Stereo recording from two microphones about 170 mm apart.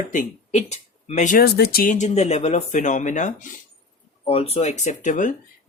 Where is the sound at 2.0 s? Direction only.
40° left (ahead or behind).